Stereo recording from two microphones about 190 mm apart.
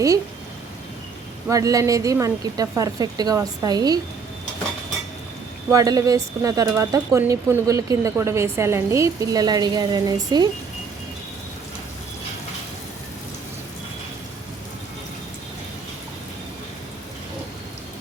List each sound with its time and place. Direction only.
1.5 s a woman's voice: 20° right (ahead or behind)
5.7 s speech: 20° right (ahead or behind)